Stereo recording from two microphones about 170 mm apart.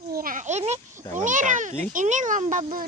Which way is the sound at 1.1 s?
50° right (ahead or behind).